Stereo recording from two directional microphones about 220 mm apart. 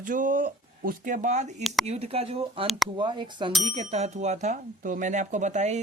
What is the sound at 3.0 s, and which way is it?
Speech, 20° right (ahead or behind).